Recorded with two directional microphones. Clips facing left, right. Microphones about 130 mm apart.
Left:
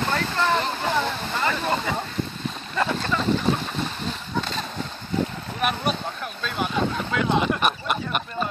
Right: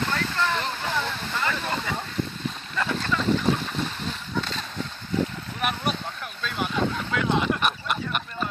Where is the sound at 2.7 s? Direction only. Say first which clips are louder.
Left 3 dB; 25° left (ahead or behind).